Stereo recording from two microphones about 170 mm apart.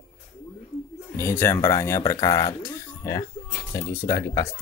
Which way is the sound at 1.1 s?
15° left (ahead or behind).